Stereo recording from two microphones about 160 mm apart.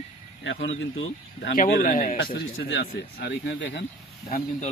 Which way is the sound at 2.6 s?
80° left.